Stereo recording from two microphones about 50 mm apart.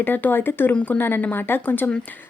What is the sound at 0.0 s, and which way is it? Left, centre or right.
Speech, left.